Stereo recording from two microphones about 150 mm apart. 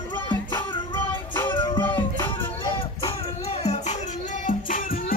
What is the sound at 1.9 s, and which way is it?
Music, 15° left (ahead or behind).